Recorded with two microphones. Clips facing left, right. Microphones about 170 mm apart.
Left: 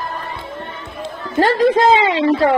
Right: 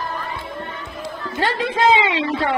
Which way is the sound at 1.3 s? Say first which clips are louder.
Left 8 dB; 40° left (ahead or behind).